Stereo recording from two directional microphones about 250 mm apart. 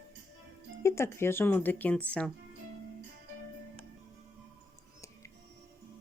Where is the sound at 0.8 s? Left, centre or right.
Centre.